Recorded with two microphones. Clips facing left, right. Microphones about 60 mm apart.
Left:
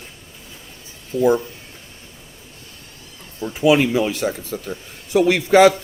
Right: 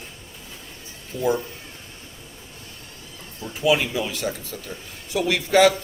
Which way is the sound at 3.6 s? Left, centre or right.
Left.